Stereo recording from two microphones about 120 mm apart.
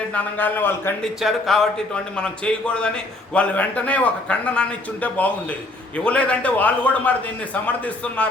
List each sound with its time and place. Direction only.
0.1 s a man's voice: 15° left (ahead or behind)
1.0 s a man's voice: centre (ahead or behind)